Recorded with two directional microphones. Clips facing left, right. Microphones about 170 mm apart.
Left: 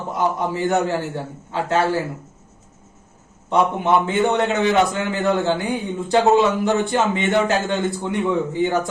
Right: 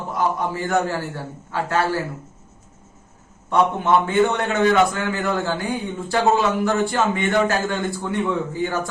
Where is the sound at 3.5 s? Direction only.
20° left (ahead or behind).